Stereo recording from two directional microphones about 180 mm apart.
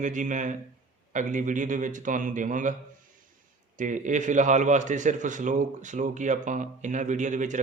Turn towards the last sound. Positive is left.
turn(degrees=-45)  # may be behind; listen again after turning